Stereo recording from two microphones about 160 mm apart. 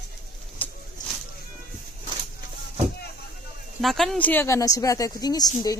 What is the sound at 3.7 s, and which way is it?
Speech, centre (ahead or behind).